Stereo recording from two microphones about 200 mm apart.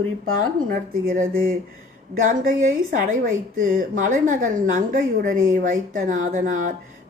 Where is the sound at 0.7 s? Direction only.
45° right (ahead or behind).